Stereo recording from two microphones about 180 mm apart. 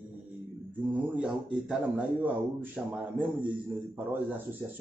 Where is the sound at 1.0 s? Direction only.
5° right (ahead or behind).